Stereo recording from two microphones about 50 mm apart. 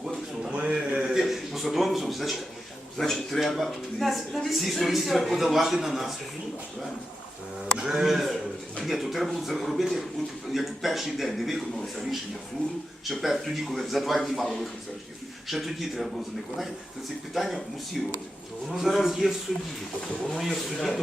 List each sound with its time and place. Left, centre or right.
0.5 s a sound: centre
1.1 s a sound: centre
3.0 s speech: centre
7.8 s speech: centre
8.0 s speech: centre
13.1 s speech: centre
17.3 s speech: centre
18.7 s speech: centre